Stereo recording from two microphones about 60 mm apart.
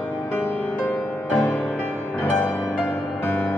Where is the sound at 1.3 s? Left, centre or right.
Left.